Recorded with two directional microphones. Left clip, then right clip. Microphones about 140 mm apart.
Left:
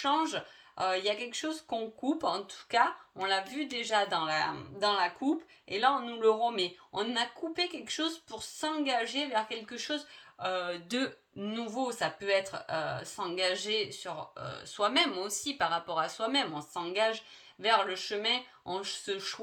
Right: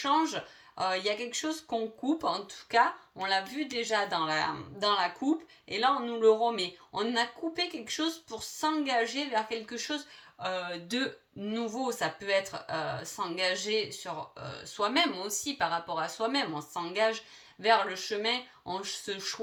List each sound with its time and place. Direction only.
0.0 s speech: 35° left (ahead or behind)